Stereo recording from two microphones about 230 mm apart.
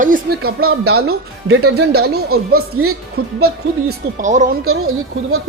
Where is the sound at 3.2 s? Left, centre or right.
Right.